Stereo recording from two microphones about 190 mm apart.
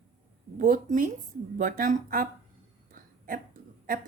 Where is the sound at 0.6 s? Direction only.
45° right (ahead or behind).